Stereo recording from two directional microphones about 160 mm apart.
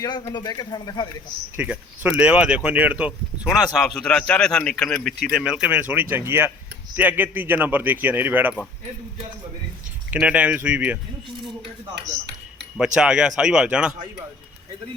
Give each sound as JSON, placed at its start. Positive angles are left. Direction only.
{"t": 0.0, "sound": "speech", "side_deg": 25}
{"t": 1.5, "sound": "a man's voice", "side_deg": -10}
{"t": 10.1, "sound": "speech", "side_deg": -10}
{"t": 12.8, "sound": "a man's voice", "side_deg": -5}